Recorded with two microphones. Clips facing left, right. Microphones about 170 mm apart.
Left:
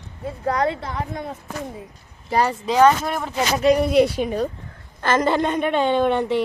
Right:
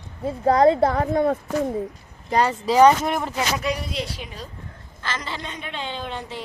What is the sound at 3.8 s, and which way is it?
A woman's voice, 55° left (ahead or behind).